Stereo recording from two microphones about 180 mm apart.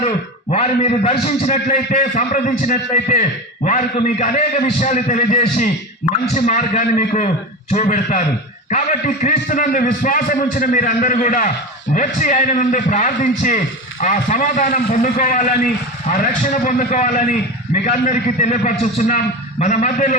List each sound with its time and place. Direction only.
0.5 s a man's voice: 35° left (ahead or behind)